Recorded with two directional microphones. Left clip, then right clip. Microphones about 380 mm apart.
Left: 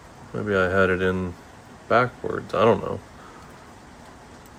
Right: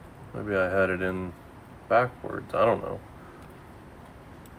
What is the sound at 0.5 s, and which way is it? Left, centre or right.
Speech, left.